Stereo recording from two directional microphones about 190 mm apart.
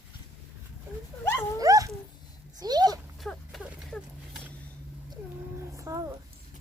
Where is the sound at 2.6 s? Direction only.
20° right (ahead or behind).